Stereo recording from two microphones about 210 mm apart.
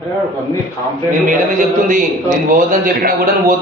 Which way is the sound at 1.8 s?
40° right (ahead or behind).